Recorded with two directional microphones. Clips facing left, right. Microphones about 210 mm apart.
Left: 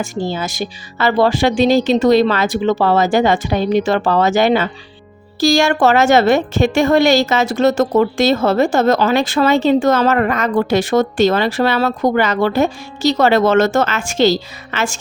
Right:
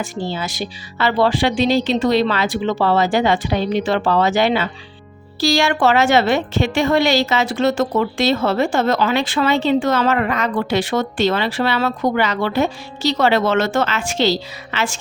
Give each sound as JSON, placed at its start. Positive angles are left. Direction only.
{"t": 0.0, "sound": "a woman's voice", "side_deg": 45}